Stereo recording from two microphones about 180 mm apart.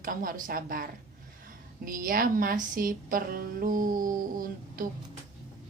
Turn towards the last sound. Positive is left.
turn(degrees=-50)  # may be behind; listen again after turning